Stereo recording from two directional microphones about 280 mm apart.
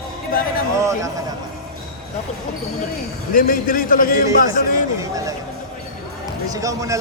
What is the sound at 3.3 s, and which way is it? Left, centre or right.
A man's voice, left.